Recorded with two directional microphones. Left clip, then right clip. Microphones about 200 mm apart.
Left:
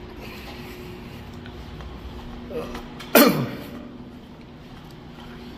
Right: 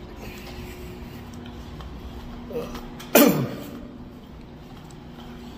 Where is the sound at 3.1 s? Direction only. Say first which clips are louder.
Left 1 dB; 20° right (ahead or behind).